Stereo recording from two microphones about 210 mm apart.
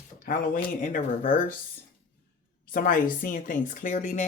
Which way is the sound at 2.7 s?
40° left (ahead or behind).